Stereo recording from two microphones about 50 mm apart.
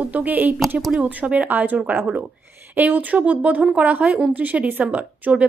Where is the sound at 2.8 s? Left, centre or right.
Right.